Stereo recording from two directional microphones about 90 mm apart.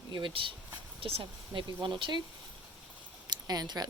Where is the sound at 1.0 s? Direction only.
90° right; by 2.2 s 60° right (ahead or behind).